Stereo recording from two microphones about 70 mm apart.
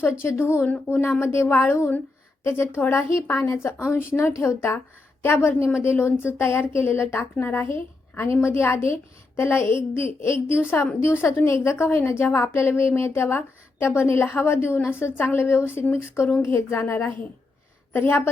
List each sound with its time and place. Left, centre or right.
0.1 s a woman's voice: left